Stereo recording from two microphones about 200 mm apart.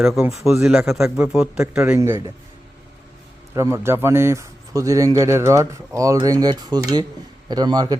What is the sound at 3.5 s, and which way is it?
A man's voice, 15° right (ahead or behind).